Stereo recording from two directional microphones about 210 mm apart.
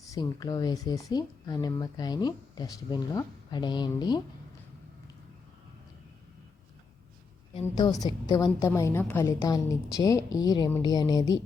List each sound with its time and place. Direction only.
0.0 s speech: 15° left (ahead or behind)
7.6 s a woman's voice: 15° left (ahead or behind)